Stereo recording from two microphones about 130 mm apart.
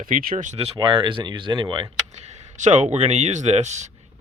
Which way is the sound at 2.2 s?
65° right (ahead or behind).